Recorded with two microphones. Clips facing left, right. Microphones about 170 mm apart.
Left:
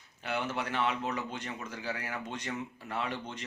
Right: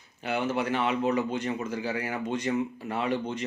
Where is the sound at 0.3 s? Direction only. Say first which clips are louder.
Right 6 dB; 10° right (ahead or behind).